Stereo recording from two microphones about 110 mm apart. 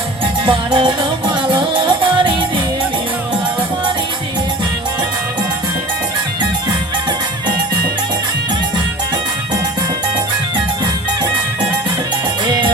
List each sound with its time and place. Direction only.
0.4 s music: 50° right (ahead or behind)
12.5 s music: 45° right (ahead or behind)